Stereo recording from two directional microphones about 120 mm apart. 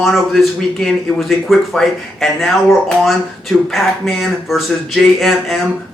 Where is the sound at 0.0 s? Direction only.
Centre (ahead or behind).